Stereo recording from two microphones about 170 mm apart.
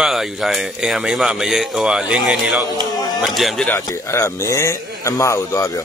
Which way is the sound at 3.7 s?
15° left (ahead or behind).